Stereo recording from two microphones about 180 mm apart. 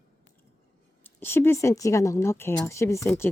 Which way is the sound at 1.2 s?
10° left (ahead or behind).